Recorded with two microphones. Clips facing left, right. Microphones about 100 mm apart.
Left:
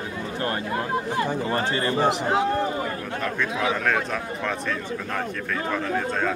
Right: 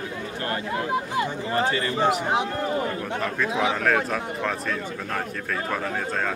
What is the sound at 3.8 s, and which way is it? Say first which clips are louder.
Speech: right 2 dB; 5° right (ahead or behind).